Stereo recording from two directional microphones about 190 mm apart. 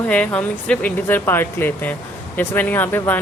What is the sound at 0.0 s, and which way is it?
Speech, 10° left (ahead or behind).